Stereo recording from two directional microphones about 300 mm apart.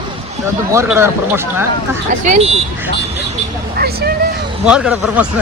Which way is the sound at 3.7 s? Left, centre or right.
Right.